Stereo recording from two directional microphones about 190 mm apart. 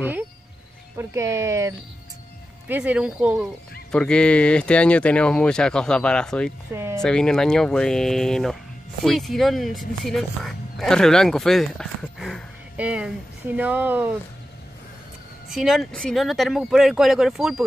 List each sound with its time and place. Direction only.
0.9 s speech: 15° right (ahead or behind)
3.9 s speech: 5° left (ahead or behind)
6.7 s a sound: 15° right (ahead or behind)
7.0 s speech: 5° left (ahead or behind)
15.5 s speech: centre (ahead or behind)